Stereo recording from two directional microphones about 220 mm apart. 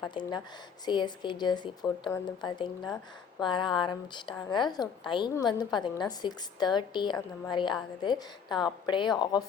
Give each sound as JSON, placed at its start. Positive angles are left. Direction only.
{"t": 0.1, "sound": "a woman's voice", "side_deg": 20}